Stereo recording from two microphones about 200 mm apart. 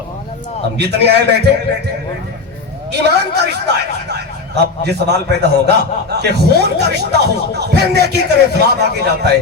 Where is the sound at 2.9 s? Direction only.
55° right (ahead or behind).